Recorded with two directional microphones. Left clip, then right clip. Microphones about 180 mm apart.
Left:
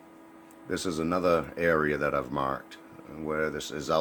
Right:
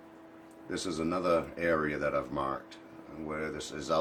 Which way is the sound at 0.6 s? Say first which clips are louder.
Left 4 dB; 50° left (ahead or behind).